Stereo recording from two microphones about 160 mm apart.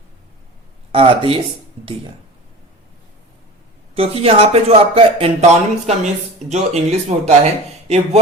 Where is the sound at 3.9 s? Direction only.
35° right (ahead or behind).